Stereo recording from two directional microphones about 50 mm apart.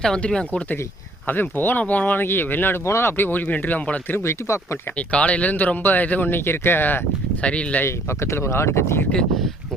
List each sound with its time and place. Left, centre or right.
0.2 s speech: centre
1.3 s speech: left
2.8 s speech: left
4.1 s speech: left
4.9 s speech: left
7.4 s speech: left
7.9 s speech: left